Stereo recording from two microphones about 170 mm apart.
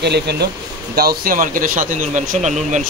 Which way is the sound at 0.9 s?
65° right (ahead or behind).